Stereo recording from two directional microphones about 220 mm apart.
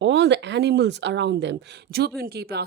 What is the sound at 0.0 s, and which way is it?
A woman's voice, 55° right (ahead or behind).